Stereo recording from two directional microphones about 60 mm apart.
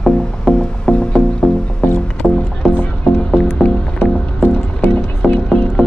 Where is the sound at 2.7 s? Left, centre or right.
Left.